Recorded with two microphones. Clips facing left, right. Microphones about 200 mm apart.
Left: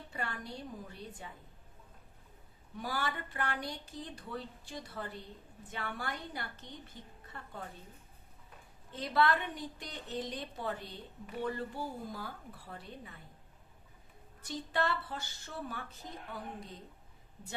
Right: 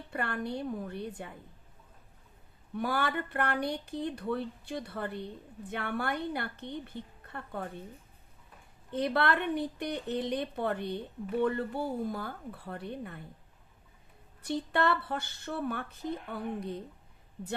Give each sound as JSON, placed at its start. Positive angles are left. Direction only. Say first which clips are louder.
{"t": 0.1, "sound": "a woman's voice", "louder": "right 8 dB", "side_deg": -60}
{"t": 2.7, "sound": "a woman's voice", "louder": "right 7 dB", "side_deg": -60}
{"t": 8.9, "sound": "a woman's voice", "louder": "right 2 dB", "side_deg": -60}
{"t": 14.4, "sound": "a woman's voice", "louder": "right 6 dB", "side_deg": -60}